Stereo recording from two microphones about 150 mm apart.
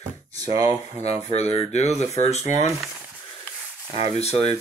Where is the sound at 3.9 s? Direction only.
45° left (ahead or behind).